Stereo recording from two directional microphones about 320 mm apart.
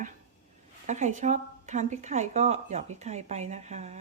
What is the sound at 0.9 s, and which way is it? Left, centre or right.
Speech, right.